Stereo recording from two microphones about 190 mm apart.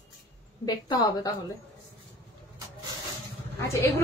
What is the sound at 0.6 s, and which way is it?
Speech, 20° left (ahead or behind).